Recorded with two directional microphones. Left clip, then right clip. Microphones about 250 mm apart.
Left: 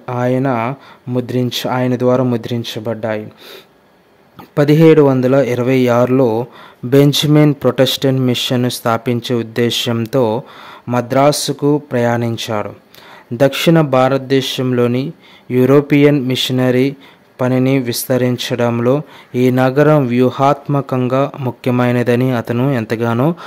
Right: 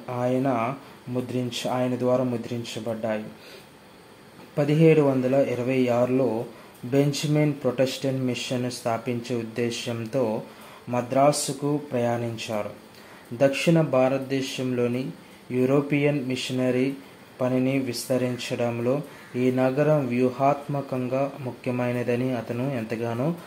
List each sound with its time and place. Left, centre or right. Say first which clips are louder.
0.0 s speech: left 9 dB; left
4.6 s speech: left 11 dB; left